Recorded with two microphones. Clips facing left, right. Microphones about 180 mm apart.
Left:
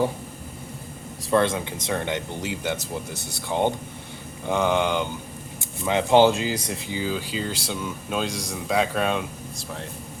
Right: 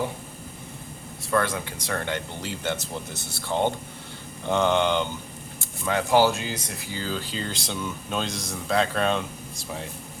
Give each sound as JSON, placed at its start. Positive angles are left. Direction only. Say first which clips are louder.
{"t": 1.3, "sound": "speech", "louder": "left 4 dB", "side_deg": 25}
{"t": 5.8, "sound": "speech", "louder": "left 3 dB", "side_deg": 20}
{"t": 6.9, "sound": "speech", "louder": "left 3 dB", "side_deg": 10}